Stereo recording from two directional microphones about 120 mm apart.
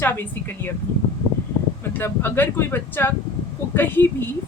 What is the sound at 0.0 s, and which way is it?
Speech, 20° left (ahead or behind).